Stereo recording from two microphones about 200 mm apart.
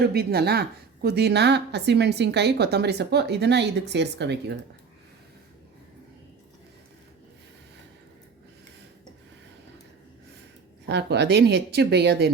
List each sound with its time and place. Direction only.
0.0 s a woman's voice: 50° right (ahead or behind)
10.8 s a woman's voice: 60° right (ahead or behind)